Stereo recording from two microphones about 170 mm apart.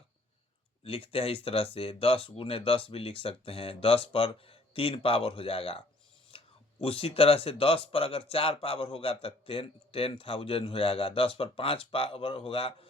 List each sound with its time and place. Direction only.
0.9 s speech: 35° left (ahead or behind)
6.3 s a sound: 35° left (ahead or behind)
6.8 s speech: 35° left (ahead or behind)